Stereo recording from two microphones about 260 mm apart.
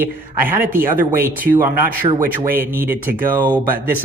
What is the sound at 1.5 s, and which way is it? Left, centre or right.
Speech, centre.